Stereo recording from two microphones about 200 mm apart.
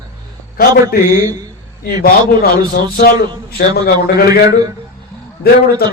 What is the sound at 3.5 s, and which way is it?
Speech, 50° left (ahead or behind).